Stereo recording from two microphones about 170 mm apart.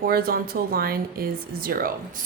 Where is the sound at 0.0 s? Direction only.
60° right (ahead or behind).